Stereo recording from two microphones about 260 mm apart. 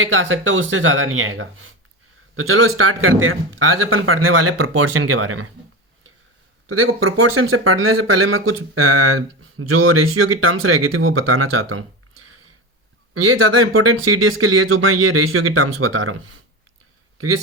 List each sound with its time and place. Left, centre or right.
0.0 s speech: right
6.7 s speech: right
13.1 s speech: right